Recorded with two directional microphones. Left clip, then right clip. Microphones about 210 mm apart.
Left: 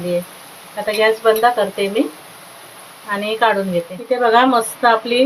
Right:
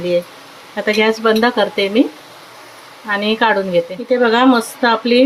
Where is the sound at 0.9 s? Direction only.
40° right (ahead or behind).